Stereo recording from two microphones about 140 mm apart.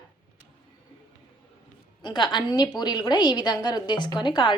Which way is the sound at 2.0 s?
30° left (ahead or behind).